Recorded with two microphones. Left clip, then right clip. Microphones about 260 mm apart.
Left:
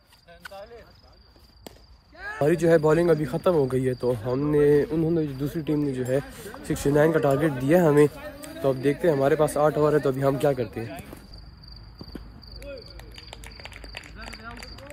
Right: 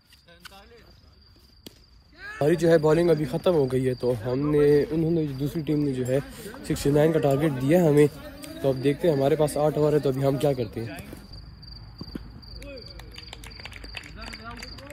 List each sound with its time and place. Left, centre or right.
2.3 s speech: centre
7.3 s speech: left
7.6 s speech: centre
10.9 s speech: centre
12.1 s a sound: left
12.9 s music: left